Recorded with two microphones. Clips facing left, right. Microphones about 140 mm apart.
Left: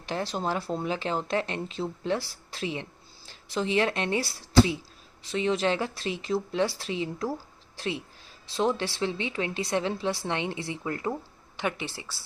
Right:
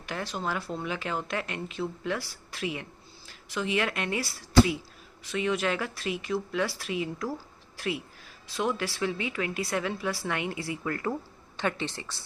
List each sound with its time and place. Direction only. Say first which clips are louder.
0.0 s speech: left 3 dB; 30° left (ahead or behind); by 12.2 s 10° left (ahead or behind)